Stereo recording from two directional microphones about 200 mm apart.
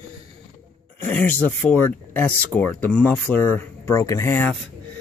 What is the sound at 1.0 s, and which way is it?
Speech, 10° left (ahead or behind).